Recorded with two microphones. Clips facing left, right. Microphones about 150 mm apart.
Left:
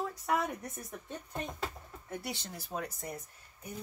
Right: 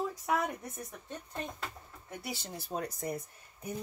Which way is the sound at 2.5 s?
30° right (ahead or behind).